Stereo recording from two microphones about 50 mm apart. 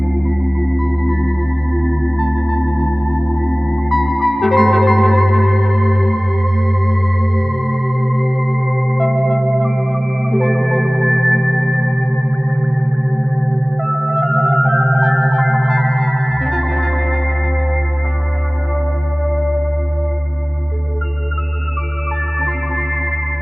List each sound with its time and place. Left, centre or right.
0.1 s organ: centre
13.8 s music: centre
19.3 s music: centre
22.4 s music: centre